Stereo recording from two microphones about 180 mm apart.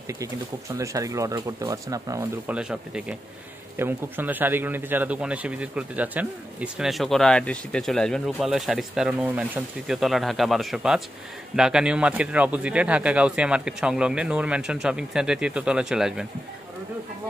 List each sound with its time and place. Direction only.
0.1 s speech: 15° right (ahead or behind)
2.4 s a man's voice: 5° right (ahead or behind)